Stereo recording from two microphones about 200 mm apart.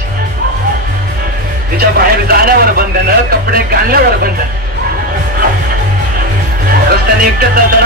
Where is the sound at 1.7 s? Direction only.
45° right (ahead or behind).